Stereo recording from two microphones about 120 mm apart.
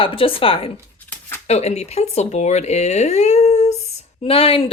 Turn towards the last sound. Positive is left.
turn(degrees=50)  # may be behind; listen again after turning